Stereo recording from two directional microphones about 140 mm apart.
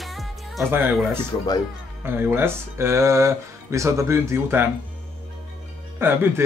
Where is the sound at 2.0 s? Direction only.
15° right (ahead or behind).